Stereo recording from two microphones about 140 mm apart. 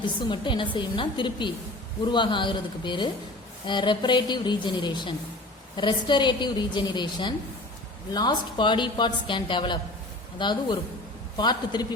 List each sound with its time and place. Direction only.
0.0 s a woman's voice: 35° left (ahead or behind)